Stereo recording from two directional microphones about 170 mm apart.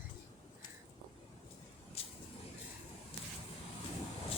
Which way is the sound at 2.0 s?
35° left (ahead or behind).